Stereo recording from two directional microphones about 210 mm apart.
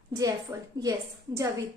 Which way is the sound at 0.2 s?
15° right (ahead or behind).